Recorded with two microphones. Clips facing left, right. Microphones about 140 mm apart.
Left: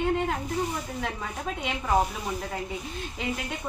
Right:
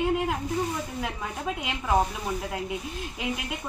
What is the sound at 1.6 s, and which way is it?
Speech, 5° right (ahead or behind).